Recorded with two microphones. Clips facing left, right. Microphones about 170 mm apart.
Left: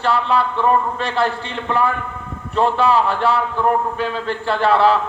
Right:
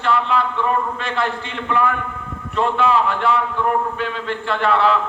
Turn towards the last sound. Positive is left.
turn(degrees=35)  # may be behind; listen again after turning